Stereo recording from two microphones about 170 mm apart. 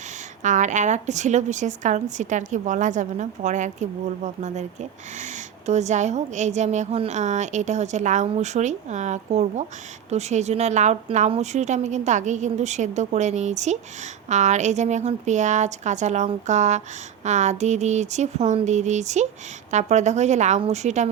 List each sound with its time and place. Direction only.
0.4 s a woman's voice: 45° right (ahead or behind)